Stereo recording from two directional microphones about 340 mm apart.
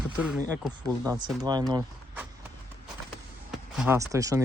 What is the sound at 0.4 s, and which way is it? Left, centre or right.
Speech, centre.